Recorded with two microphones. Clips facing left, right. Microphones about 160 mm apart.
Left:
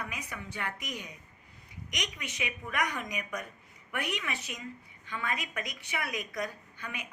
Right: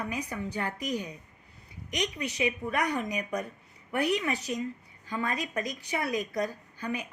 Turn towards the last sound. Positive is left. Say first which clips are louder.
# right 8 dB
turn(degrees=-35)  # may be behind; listen again after turning